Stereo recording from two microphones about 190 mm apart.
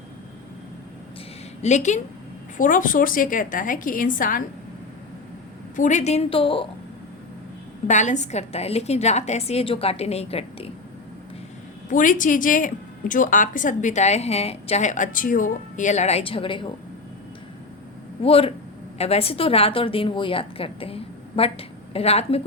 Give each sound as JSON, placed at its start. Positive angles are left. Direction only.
{"t": 1.6, "sound": "a woman's voice", "side_deg": 40}
{"t": 5.7, "sound": "a woman's voice", "side_deg": 40}
{"t": 7.9, "sound": "a woman's voice", "side_deg": 40}
{"t": 11.9, "sound": "a woman's voice", "side_deg": 45}
{"t": 18.2, "sound": "a woman's voice", "side_deg": 30}